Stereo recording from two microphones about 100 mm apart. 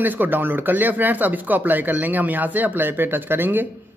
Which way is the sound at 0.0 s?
20° right (ahead or behind).